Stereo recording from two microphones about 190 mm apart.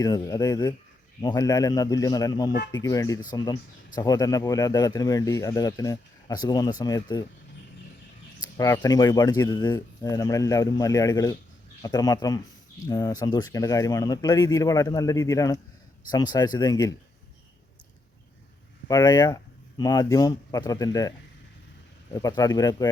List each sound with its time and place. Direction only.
0.0 s speech: 20° left (ahead or behind)
8.4 s speech: 15° left (ahead or behind)
18.9 s speech: 20° left (ahead or behind)
22.1 s speech: 20° left (ahead or behind)